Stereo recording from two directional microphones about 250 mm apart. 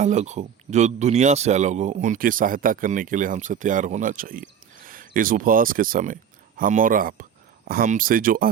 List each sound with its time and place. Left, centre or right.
0.0 s speech: right